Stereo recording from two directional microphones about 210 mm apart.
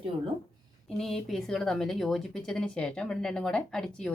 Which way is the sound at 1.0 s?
Centre (ahead or behind).